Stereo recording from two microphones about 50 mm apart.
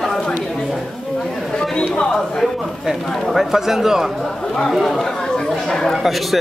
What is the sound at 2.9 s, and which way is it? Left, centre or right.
Speech, centre.